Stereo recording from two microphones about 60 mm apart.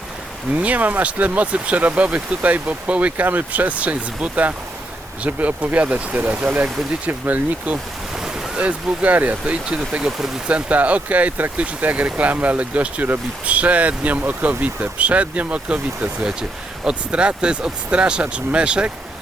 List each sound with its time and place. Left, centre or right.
0.5 s speech: right
8.1 s waves: centre
8.5 s speech: right
10.1 s speech: centre
10.4 s speech: right